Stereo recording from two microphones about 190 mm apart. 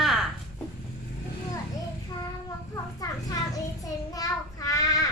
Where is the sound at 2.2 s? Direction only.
20° left (ahead or behind).